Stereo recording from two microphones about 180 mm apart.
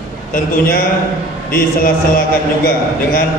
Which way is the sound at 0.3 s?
50° left (ahead or behind).